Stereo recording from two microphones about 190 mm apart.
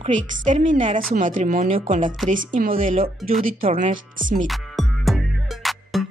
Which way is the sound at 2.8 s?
30° right (ahead or behind).